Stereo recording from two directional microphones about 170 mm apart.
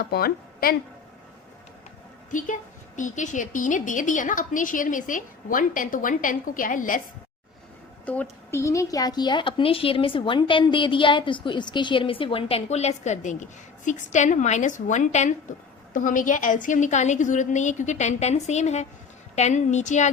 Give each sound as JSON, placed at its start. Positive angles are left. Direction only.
{"t": 0.0, "sound": "a woman's voice", "side_deg": 65}
{"t": 2.3, "sound": "a woman's voice", "side_deg": 50}
{"t": 8.0, "sound": "a woman's voice", "side_deg": 10}